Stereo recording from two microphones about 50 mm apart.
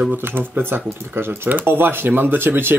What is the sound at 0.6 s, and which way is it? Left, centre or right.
Speech, right.